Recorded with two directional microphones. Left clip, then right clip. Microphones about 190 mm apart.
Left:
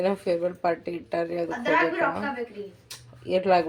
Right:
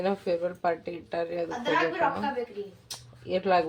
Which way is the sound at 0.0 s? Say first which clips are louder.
Left 3 dB; 15° left (ahead or behind).